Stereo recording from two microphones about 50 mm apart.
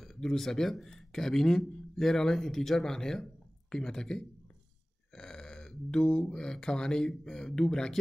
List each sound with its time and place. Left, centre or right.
0.0 s speech: centre
5.1 s a sound: centre
6.3 s speech: centre